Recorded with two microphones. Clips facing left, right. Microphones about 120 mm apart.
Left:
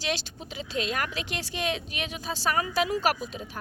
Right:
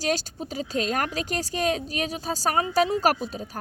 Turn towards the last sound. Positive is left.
turn(degrees=-40)  # may be behind; listen again after turning